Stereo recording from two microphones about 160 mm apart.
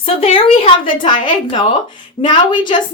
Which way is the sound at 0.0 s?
35° left (ahead or behind).